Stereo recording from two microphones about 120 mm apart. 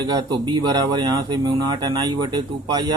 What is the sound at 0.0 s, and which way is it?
Speech, 35° right (ahead or behind).